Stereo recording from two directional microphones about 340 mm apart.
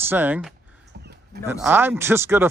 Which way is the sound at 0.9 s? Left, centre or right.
Right.